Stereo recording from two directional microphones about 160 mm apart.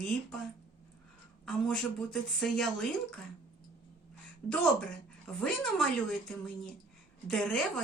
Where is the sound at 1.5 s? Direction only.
5° left (ahead or behind).